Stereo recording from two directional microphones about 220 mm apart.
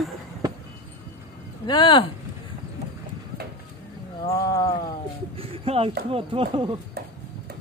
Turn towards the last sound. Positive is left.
turn(degrees=-20)  # may be behind; listen again after turning